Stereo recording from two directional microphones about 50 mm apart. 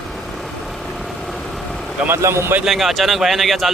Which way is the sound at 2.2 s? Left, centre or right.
Right.